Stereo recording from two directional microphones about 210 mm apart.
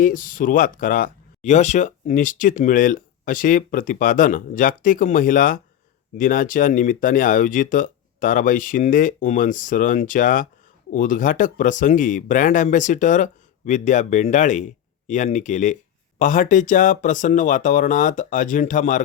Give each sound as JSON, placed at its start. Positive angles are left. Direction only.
{"t": 0.0, "sound": "speech", "side_deg": 40}